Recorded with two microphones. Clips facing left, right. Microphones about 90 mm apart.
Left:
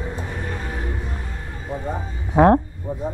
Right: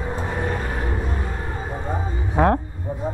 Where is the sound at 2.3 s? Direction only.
25° left (ahead or behind).